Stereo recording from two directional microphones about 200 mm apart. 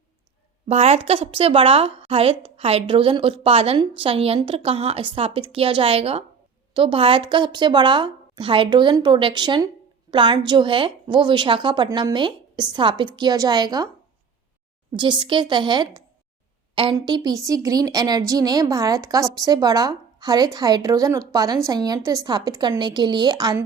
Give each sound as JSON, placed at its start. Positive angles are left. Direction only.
{"t": 0.7, "sound": "a woman's voice", "side_deg": -30}
{"t": 14.9, "sound": "a woman's voice", "side_deg": -25}
{"t": 17.1, "sound": "a woman's voice", "side_deg": -20}